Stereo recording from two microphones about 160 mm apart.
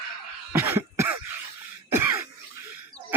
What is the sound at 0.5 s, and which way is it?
Cough, 15° right (ahead or behind).